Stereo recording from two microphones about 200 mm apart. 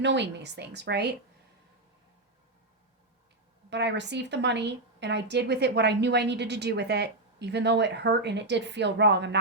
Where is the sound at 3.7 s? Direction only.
60° right (ahead or behind).